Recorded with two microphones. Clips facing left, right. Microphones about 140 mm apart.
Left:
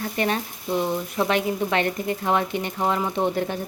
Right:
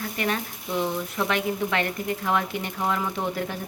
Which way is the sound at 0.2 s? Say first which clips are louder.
Left 3 dB; 25° left (ahead or behind).